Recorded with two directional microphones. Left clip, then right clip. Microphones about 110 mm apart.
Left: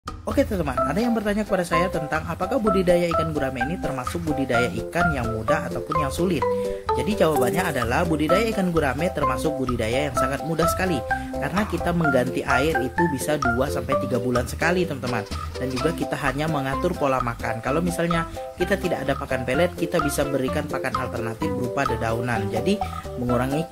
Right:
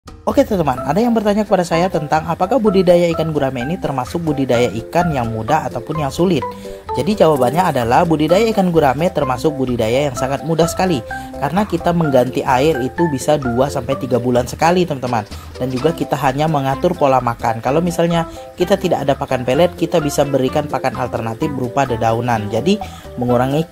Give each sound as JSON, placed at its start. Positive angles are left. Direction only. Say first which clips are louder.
{"t": 0.4, "sound": "speech", "louder": "right 7 dB", "side_deg": -30}
{"t": 16.1, "sound": "speech", "louder": "right 9 dB", "side_deg": -20}